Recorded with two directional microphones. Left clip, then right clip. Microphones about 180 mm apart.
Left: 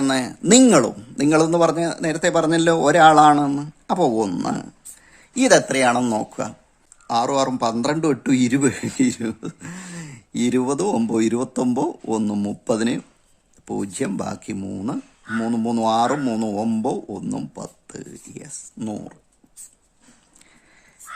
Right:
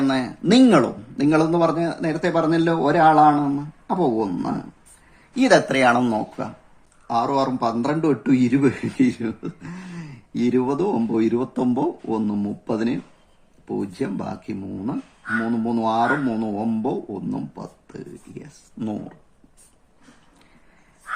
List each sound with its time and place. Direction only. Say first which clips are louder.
0.0 s speech: left 1 dB; 40° left (ahead or behind)
5.3 s speech: left 1 dB; 35° left (ahead or behind)
18.8 s speech: right 1 dB; 30° left (ahead or behind)